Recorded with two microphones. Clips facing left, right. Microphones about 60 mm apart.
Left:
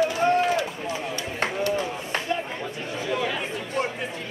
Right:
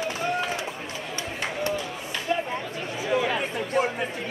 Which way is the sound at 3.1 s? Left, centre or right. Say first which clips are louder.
Right 3 dB; centre.